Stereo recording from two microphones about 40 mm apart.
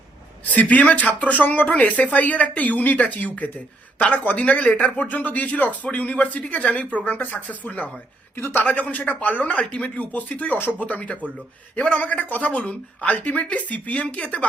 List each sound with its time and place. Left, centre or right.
0.5 s speech: left
8.4 s a man's voice: left
8.6 s speech: left
10.0 s speech: left